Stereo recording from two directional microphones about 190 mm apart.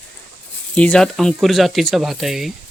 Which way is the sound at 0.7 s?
5° left (ahead or behind).